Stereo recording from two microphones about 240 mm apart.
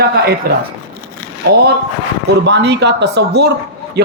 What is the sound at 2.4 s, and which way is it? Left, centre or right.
A woman's voice, right.